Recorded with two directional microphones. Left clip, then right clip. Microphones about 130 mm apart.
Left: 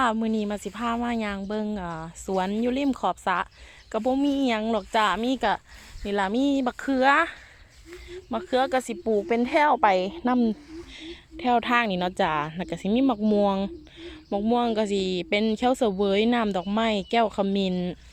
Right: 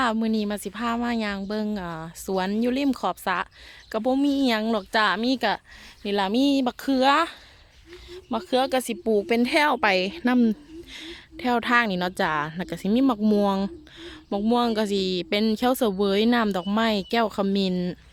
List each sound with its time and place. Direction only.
0.0 s a woman's voice: 20° right (ahead or behind); by 10.5 s 40° right (ahead or behind)
10.9 s a woman's voice: 25° right (ahead or behind)